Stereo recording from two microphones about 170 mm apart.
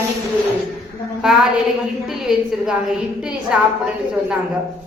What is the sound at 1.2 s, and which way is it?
Speech, 5° right (ahead or behind).